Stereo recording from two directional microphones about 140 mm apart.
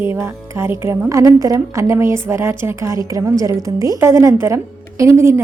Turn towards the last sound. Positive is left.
turn(degrees=-20)  # may be behind; listen again after turning